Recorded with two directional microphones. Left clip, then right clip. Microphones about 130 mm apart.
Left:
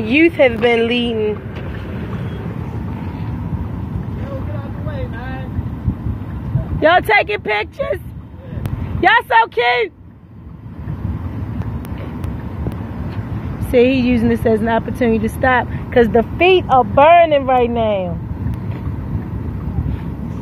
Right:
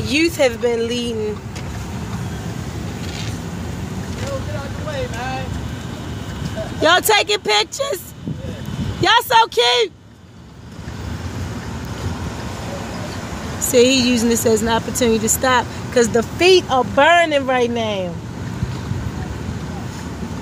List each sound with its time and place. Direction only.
0.0 s speech: 20° right (ahead or behind)
6.8 s speech: 10° right (ahead or behind)
9.0 s speech: 10° right (ahead or behind)
13.7 s speech: 15° right (ahead or behind)
15.9 s speech: 5° left (ahead or behind)